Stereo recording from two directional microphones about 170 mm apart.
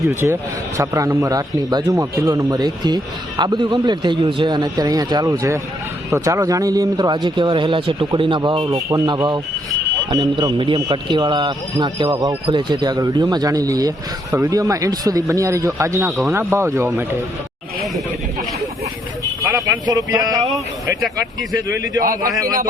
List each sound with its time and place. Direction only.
0.2 s speech: centre (ahead or behind)
0.8 s speech: 20° right (ahead or behind)
19.2 s speech: 20° right (ahead or behind)
22.3 s speech: 20° right (ahead or behind)